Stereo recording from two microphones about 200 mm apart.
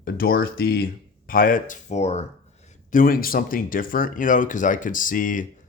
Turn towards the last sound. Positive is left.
turn(degrees=40)  # may be behind; listen again after turning